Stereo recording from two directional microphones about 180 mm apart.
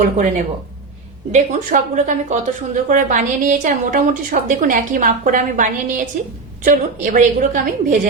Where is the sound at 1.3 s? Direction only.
45° right (ahead or behind).